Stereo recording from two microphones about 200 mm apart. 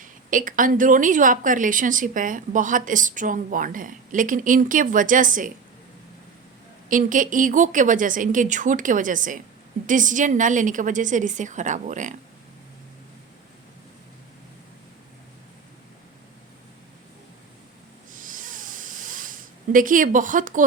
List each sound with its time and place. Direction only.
0.0 s a woman's voice: 40° right (ahead or behind)
6.8 s a woman's voice: 40° right (ahead or behind)
18.1 s a sound: 40° right (ahead or behind)